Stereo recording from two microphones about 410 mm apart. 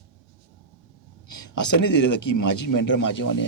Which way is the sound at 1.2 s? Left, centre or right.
Left.